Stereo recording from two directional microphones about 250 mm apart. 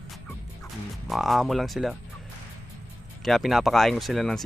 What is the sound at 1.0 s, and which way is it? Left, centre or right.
Speech, centre.